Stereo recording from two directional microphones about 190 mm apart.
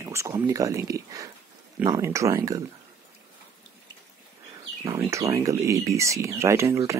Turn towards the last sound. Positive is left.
turn(degrees=-15)  # may be behind; listen again after turning